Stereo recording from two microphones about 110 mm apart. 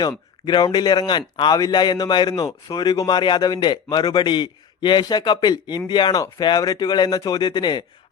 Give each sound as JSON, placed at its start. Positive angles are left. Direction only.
{"t": 0.4, "sound": "a man's voice", "side_deg": 40}